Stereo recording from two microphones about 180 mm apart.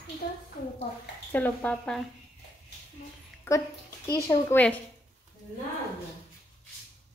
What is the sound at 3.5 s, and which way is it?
A woman's voice, 15° left (ahead or behind).